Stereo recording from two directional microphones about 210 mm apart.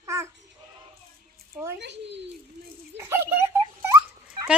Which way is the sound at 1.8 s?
55° right (ahead or behind).